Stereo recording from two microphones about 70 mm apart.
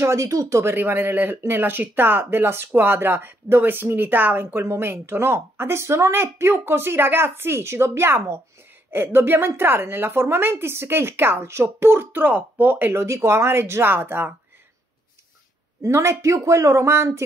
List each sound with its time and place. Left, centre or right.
0.0 s speech: right
12.9 s speech: right
15.8 s speech: right